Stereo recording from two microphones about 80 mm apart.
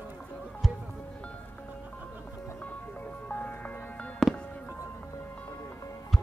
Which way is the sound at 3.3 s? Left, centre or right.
Left.